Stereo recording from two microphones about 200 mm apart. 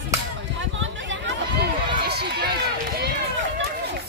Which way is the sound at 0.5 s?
70° right (ahead or behind).